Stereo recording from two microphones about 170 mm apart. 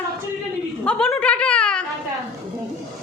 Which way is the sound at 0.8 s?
5° left (ahead or behind).